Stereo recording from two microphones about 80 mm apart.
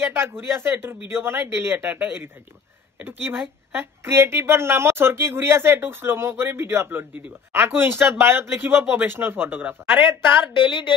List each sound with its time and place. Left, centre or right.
0.1 s a woman's voice: right
10.5 s speech: left